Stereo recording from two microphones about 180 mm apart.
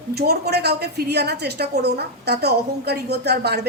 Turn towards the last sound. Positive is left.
turn(degrees=-65)  # may be behind; listen again after turning